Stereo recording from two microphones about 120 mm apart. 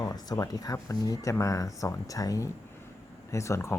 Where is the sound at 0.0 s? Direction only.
30° left (ahead or behind).